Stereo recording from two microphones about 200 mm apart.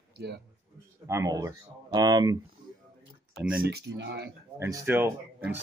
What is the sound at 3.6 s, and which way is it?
Speech, 55° right (ahead or behind).